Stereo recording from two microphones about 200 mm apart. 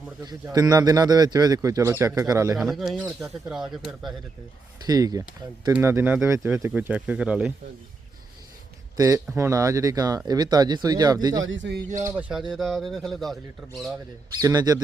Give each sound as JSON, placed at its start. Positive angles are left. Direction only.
{"t": 0.4, "sound": "a man's voice", "side_deg": -20}
{"t": 2.6, "sound": "speech", "side_deg": 0}
{"t": 4.9, "sound": "a man's voice", "side_deg": -20}
{"t": 9.0, "sound": "a man's voice", "side_deg": -15}
{"t": 11.4, "sound": "a man's voice", "side_deg": -65}
{"t": 12.0, "sound": "speech", "side_deg": -5}
{"t": 14.4, "sound": "speech", "side_deg": -20}